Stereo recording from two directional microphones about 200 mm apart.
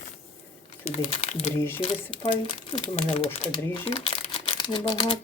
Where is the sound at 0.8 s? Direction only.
35° left (ahead or behind).